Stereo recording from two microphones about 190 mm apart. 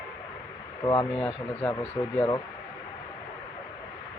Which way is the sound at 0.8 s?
20° left (ahead or behind).